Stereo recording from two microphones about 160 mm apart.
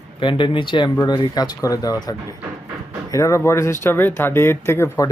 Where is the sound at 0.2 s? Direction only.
30° left (ahead or behind).